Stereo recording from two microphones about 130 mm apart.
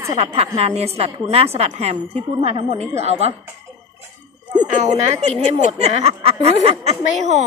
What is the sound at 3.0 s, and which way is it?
Speech, 55° right (ahead or behind).